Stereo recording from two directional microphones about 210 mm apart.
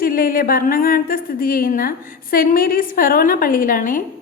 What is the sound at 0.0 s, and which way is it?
A woman's voice, 45° left (ahead or behind).